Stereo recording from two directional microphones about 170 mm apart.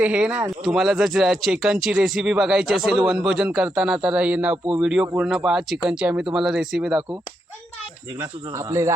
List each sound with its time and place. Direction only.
0.0 s speech: 5° right (ahead or behind)
4.5 s speech: 30° right (ahead or behind)
4.8 s speech: 5° right (ahead or behind)
8.2 s speech: 15° right (ahead or behind)